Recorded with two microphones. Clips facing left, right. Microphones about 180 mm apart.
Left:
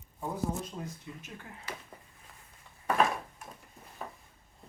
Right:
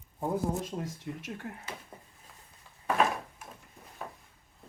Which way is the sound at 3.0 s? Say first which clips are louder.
Even; centre (ahead or behind).